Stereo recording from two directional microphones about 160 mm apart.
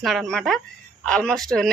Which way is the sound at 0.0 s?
Centre (ahead or behind).